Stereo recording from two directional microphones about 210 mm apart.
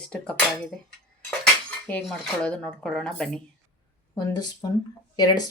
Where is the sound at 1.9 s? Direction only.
5° left (ahead or behind).